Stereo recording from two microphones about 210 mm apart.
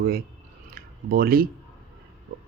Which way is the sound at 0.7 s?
45° right (ahead or behind).